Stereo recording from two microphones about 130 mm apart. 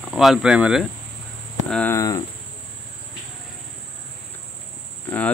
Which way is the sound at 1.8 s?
25° left (ahead or behind).